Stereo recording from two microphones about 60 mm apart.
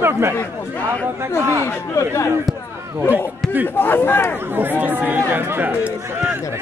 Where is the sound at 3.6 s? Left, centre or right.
Left.